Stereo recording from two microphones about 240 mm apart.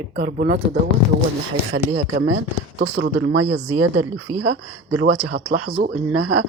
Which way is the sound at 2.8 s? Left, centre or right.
Right.